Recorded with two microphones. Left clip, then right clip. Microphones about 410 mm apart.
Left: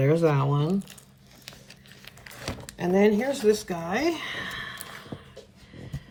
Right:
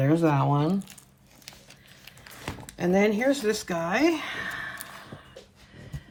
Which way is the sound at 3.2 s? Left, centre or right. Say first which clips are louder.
Left 1 dB; centre.